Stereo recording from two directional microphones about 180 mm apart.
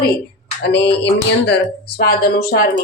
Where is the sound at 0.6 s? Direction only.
70° left (ahead or behind).